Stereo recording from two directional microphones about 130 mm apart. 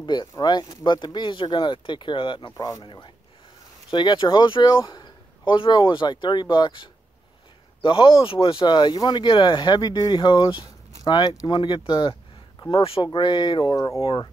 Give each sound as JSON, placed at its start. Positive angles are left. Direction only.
{"t": 0.0, "sound": "speech", "side_deg": 35}
{"t": 2.5, "sound": "speech", "side_deg": 25}
{"t": 2.8, "sound": "speech", "side_deg": 35}
{"t": 14.0, "sound": "speech", "side_deg": 35}